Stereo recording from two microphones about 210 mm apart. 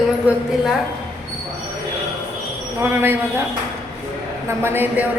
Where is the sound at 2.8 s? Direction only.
10° right (ahead or behind).